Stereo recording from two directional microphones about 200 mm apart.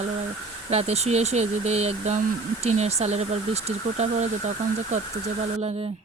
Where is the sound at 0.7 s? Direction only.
30° right (ahead or behind).